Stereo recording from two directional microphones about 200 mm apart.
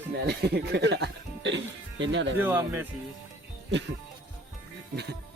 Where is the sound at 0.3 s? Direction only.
55° right (ahead or behind).